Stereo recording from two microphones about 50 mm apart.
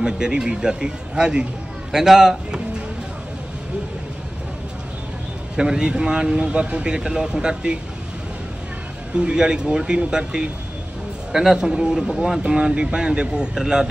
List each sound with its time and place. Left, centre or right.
0.0 s speech: centre
5.6 s speech: centre
9.1 s speech: centre